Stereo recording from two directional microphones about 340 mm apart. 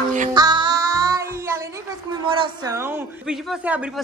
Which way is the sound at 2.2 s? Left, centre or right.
Centre.